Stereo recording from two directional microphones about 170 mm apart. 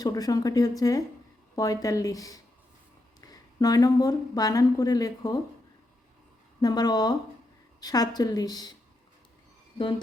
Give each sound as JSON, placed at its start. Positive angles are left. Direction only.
{"t": 0.0, "sound": "a woman's voice", "side_deg": 20}
{"t": 6.6, "sound": "a woman's voice", "side_deg": 25}